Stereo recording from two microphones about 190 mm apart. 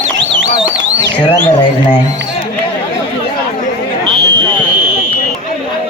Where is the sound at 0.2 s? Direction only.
70° right (ahead or behind).